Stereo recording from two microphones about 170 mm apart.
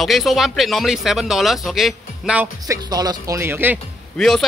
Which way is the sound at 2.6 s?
20° right (ahead or behind).